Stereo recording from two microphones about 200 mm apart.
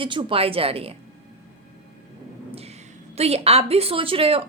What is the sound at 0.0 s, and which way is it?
Speech, 25° right (ahead or behind).